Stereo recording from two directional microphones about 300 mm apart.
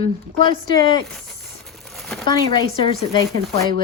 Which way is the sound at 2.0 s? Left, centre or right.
Centre.